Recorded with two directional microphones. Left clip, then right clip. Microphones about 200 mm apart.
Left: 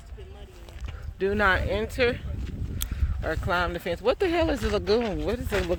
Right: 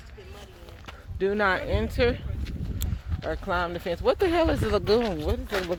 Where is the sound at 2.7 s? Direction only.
10° left (ahead or behind).